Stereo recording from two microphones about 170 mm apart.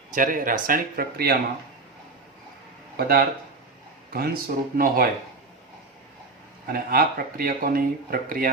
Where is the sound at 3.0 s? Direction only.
60° right (ahead or behind).